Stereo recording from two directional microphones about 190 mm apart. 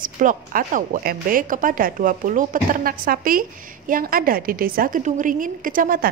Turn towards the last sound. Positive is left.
turn(degrees=-45)  # may be behind; listen again after turning